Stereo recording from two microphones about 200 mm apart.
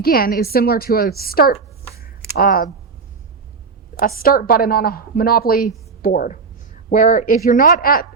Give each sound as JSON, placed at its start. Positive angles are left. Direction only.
{"t": 0.0, "sound": "a woman's voice", "side_deg": 50}
{"t": 4.0, "sound": "a woman's voice", "side_deg": 45}